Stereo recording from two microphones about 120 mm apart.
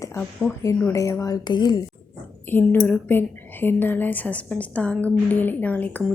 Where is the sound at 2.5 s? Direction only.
15° left (ahead or behind).